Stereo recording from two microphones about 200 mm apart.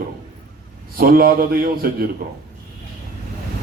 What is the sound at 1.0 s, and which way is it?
Speech, 45° right (ahead or behind).